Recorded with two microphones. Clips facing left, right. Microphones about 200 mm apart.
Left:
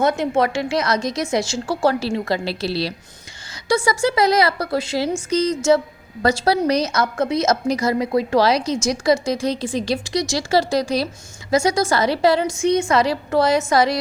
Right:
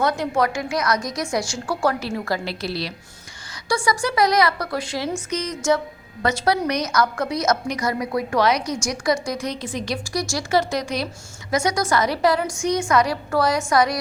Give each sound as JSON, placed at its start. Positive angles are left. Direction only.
{"t": 0.0, "sound": "a woman's voice", "side_deg": 25}